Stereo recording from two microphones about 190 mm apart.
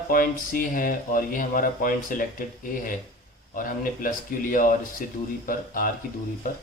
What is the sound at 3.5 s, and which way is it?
Speech, 45° left (ahead or behind).